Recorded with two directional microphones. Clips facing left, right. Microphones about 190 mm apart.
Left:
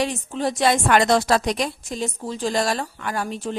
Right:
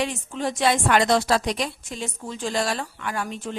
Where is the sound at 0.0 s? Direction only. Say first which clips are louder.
Left 3 dB; 35° left (ahead or behind).